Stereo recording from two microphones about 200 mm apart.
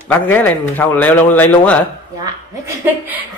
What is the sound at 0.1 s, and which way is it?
Speech, 10° left (ahead or behind).